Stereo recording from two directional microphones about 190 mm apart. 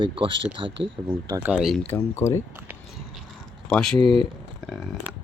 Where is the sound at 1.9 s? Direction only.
15° left (ahead or behind).